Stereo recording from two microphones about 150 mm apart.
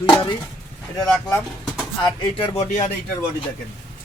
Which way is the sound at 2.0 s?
30° left (ahead or behind).